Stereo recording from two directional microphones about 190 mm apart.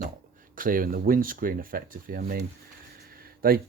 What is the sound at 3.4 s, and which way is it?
Speech, 50° right (ahead or behind).